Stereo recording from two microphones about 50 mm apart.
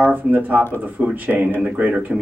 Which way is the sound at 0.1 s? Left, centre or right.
Right.